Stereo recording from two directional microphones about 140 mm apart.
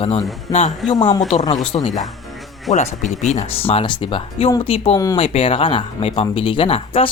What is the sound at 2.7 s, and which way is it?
Speech, 60° left (ahead or behind).